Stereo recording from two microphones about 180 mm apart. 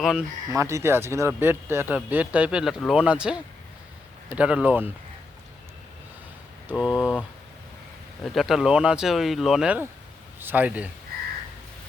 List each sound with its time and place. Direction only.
0.0 s speech: 5° right (ahead or behind)
0.5 s speech: 15° right (ahead or behind)
6.7 s speech: 5° right (ahead or behind)
8.2 s speech: centre (ahead or behind)